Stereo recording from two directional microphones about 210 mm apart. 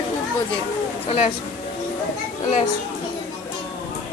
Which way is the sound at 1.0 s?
30° left (ahead or behind).